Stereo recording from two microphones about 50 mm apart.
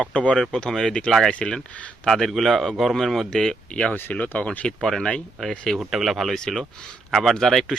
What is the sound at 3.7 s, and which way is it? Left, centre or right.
Speech, left.